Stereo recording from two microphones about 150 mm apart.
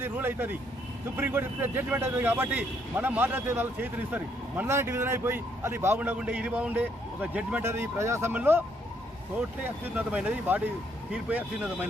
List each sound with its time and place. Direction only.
0.0 s speech: 15° right (ahead or behind)
9.6 s speech: 10° right (ahead or behind)